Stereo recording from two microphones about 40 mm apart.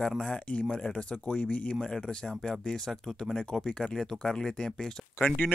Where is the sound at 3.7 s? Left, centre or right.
Left.